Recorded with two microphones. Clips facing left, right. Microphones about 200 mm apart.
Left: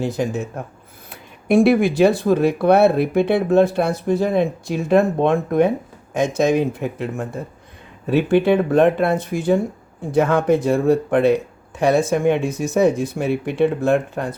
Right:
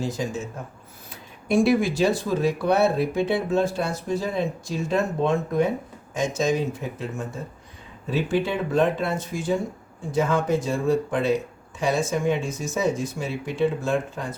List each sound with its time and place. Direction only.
0.0 s speech: 60° left (ahead or behind)